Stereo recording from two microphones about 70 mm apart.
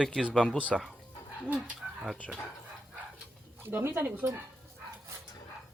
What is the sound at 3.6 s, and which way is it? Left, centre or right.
Speech, right.